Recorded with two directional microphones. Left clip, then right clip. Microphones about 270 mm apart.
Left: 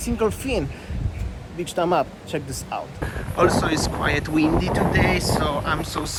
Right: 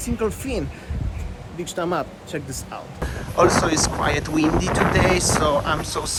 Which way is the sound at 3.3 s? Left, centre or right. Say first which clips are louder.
Right 2 dB; centre.